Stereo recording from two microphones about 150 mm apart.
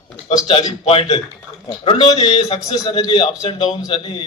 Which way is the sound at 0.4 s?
35° left (ahead or behind).